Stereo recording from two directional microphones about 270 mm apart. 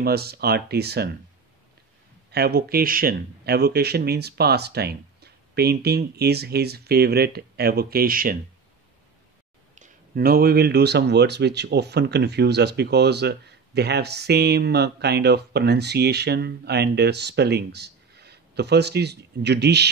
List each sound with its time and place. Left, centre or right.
0.0 s speech: right
2.3 s speech: right
9.8 s speech: right